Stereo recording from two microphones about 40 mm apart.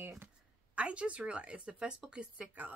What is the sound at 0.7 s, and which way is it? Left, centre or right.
Speech, right.